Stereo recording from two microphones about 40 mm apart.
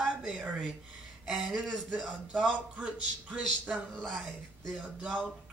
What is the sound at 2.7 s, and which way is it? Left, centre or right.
Speech, right.